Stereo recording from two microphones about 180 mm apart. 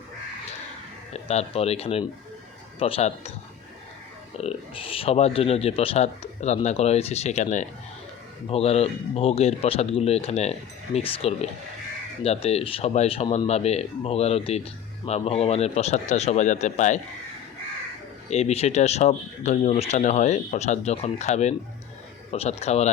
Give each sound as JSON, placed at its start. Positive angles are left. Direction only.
{"t": 1.1, "sound": "speech", "side_deg": 35}
{"t": 4.4, "sound": "speech", "side_deg": 35}
{"t": 18.3, "sound": "speech", "side_deg": 35}